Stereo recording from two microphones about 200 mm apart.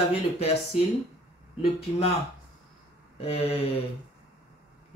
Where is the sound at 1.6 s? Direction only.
30° left (ahead or behind).